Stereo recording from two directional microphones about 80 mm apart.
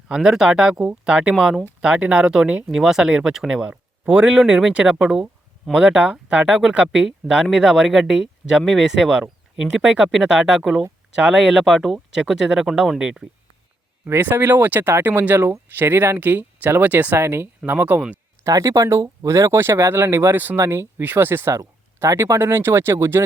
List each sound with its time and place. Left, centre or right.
0.1 s speech: centre
4.0 s speech: right
11.6 s speech: centre
14.0 s speech: right
18.4 s speech: right